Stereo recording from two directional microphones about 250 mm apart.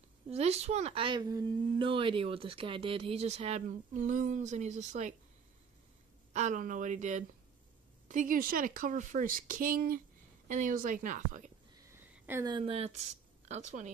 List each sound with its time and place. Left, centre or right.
0.3 s a woman's voice: right
6.3 s a woman's voice: right
11.9 s a woman's voice: centre; by 13.8 s right